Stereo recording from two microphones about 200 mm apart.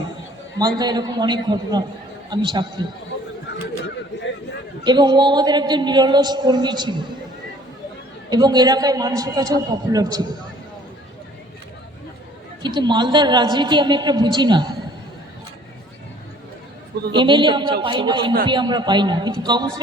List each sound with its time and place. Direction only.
0.8 s a man's voice: 20° right (ahead or behind)
4.8 s a man's voice: 20° right (ahead or behind)
8.3 s a man's voice: 20° right (ahead or behind)
12.6 s a man's voice: 20° right (ahead or behind)
17.1 s a man's voice: 25° right (ahead or behind)